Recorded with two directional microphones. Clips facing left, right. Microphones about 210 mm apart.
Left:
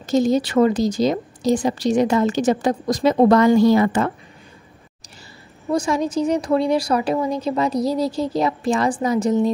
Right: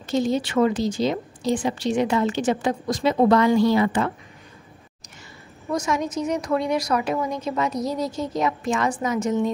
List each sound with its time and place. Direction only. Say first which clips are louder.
0.0 s a woman's voice: left 5 dB; 40° left (ahead or behind)
5.7 s a woman's voice: left 4 dB; 30° left (ahead or behind)